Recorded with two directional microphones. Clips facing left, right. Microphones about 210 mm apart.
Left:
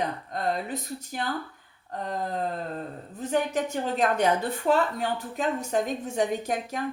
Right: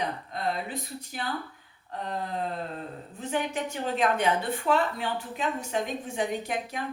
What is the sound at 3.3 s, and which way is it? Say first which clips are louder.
Speech: left 4 dB; 40° left (ahead or behind).